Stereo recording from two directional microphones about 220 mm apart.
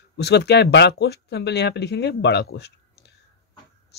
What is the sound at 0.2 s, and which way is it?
Speech, 50° left (ahead or behind).